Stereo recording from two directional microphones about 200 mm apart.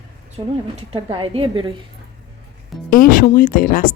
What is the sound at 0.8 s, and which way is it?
Speech, 25° right (ahead or behind).